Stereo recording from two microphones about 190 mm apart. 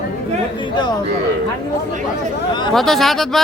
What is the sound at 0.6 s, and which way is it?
Speech, 25° left (ahead or behind).